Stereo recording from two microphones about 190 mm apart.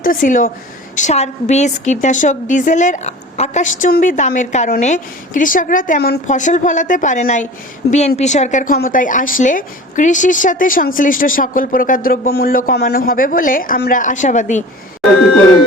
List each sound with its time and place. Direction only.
0.0 s a woman's voice: 45° left (ahead or behind)